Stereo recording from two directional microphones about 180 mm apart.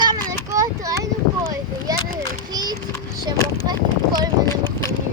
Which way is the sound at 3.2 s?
20° right (ahead or behind).